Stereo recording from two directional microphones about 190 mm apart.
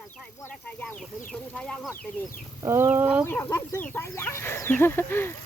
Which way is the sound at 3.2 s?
15° left (ahead or behind).